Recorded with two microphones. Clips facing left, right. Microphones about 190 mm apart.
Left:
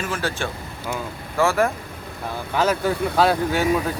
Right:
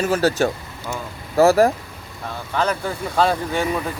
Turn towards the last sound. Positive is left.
turn(degrees=5)  # may be behind; listen again after turning